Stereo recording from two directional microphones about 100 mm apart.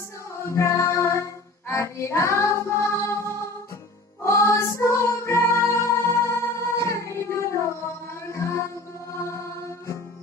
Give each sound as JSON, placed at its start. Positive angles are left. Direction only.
{"t": 0.4, "sound": "music", "side_deg": 30}
{"t": 4.2, "sound": "music", "side_deg": 30}